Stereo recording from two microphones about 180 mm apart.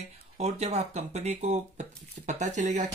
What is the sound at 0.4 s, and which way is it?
Speech, 35° right (ahead or behind).